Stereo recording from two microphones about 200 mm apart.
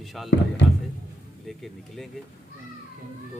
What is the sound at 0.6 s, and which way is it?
Speech, 65° left (ahead or behind).